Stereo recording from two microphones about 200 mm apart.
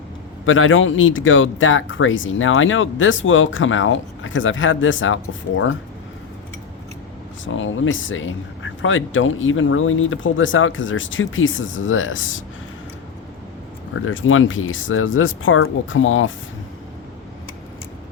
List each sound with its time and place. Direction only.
0.4 s speech: 80° left
7.4 s speech: 75° left (ahead or behind)
13.9 s speech: 75° left (ahead or behind)